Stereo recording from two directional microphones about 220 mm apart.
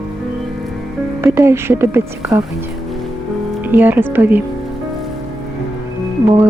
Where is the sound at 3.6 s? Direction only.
10° right (ahead or behind).